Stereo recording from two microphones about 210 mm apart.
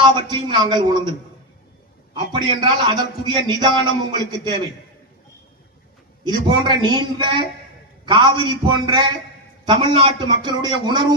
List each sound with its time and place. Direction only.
0.0 s a man's voice: 20° right (ahead or behind)
2.1 s a man's voice: 20° right (ahead or behind)
6.2 s a man's voice: 20° right (ahead or behind)